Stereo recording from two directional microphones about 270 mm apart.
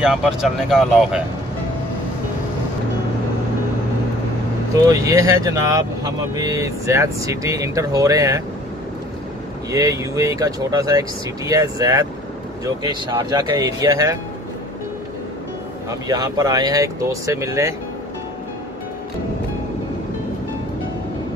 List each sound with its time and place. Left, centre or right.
0.0 s speech: centre
4.8 s speech: centre
9.7 s speech: centre
15.9 s speech: centre